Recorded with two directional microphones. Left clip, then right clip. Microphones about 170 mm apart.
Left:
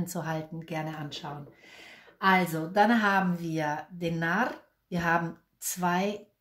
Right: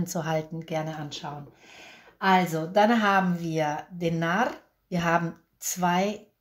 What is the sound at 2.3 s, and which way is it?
Speech, 35° right (ahead or behind).